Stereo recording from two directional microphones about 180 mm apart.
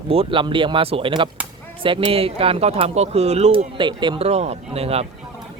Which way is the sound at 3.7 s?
25° right (ahead or behind).